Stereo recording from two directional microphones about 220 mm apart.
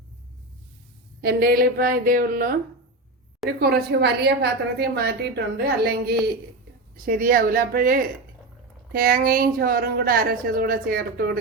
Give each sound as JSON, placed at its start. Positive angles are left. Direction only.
{"t": 1.2, "sound": "a woman's voice", "side_deg": -45}
{"t": 3.6, "sound": "a woman's voice", "side_deg": -45}